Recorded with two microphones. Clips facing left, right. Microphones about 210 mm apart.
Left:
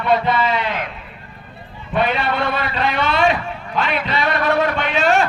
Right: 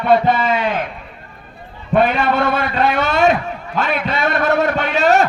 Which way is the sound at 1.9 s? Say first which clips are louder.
Right 5 dB; 45° right (ahead or behind).